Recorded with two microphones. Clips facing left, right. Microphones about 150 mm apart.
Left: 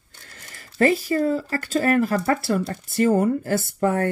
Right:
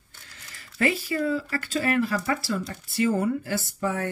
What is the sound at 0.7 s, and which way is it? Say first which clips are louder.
Speech: left 6 dB; 40° left (ahead or behind).